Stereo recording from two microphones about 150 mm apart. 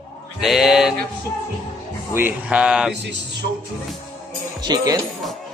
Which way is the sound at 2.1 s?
10° right (ahead or behind).